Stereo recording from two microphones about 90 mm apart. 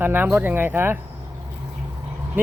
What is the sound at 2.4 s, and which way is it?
Speech, 20° right (ahead or behind).